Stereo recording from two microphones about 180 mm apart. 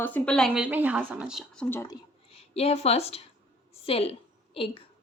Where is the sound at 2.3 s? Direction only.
35° left (ahead or behind).